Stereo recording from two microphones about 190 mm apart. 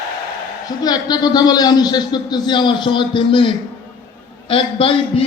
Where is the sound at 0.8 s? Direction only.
20° left (ahead or behind).